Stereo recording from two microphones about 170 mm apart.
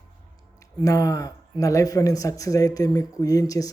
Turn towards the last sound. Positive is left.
turn(degrees=20)  # may be behind; listen again after turning